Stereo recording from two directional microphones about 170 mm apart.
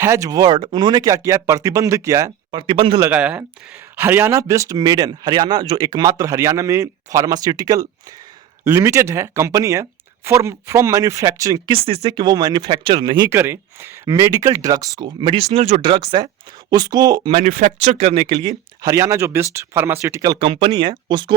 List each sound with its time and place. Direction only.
0.0 s speech: 15° right (ahead or behind)
2.5 s speech: 30° right (ahead or behind)
3.0 s speech: 10° right (ahead or behind); by 13.3 s 25° right (ahead or behind)
13.3 s speech: 15° right (ahead or behind); by 15.9 s 40° right (ahead or behind)
15.9 s speech: 25° right (ahead or behind)
17.4 s speech: 50° right (ahead or behind)
18.2 s speech: 25° right (ahead or behind)